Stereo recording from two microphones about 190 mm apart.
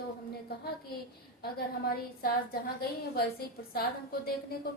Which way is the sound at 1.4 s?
55° left (ahead or behind).